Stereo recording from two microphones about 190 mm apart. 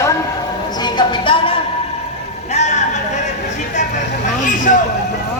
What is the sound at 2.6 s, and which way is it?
Music, 35° left (ahead or behind).